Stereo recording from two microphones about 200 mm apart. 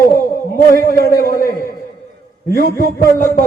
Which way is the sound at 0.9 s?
45° left (ahead or behind).